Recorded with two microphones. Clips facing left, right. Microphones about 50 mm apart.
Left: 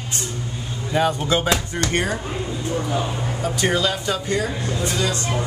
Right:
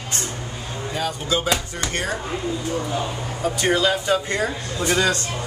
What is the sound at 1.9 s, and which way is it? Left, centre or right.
Speech, centre.